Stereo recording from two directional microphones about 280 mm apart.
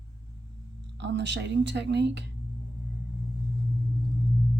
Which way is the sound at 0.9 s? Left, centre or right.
Right.